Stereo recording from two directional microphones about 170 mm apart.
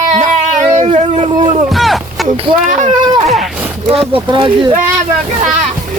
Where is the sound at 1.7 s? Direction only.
Centre (ahead or behind).